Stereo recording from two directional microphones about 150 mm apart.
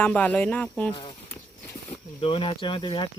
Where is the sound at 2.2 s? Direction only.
35° left (ahead or behind).